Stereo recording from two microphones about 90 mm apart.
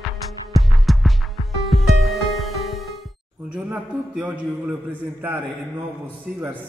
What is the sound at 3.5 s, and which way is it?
A man's voice, 10° right (ahead or behind).